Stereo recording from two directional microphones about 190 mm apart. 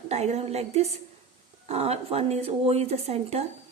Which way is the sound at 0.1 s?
35° right (ahead or behind).